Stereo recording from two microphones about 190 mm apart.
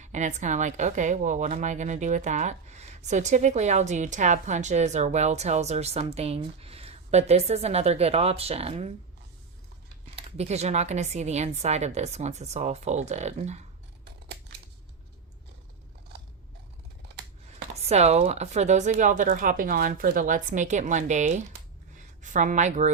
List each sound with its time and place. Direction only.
0.0 s a woman's voice: 40° right (ahead or behind)
10.2 s a woman's voice: 35° right (ahead or behind)
17.7 s a woman's voice: 35° right (ahead or behind)